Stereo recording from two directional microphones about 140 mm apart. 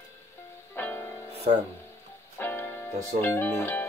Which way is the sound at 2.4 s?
15° left (ahead or behind).